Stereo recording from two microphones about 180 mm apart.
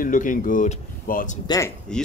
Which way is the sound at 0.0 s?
45° left (ahead or behind).